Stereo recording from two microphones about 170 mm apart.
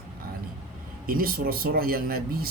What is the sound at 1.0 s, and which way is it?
Speech, 60° right (ahead or behind).